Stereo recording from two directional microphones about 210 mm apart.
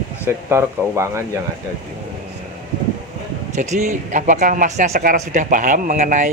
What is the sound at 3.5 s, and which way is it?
Speech, 35° right (ahead or behind).